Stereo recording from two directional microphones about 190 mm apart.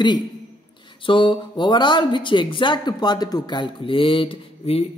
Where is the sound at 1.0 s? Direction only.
25° left (ahead or behind).